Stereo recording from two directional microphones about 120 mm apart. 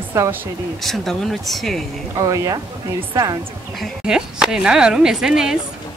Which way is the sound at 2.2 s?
30° right (ahead or behind).